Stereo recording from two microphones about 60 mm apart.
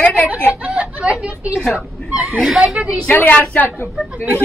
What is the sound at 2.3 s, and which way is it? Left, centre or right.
Speech, centre.